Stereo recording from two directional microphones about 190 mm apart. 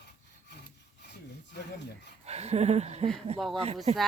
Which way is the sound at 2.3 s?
35° right (ahead or behind).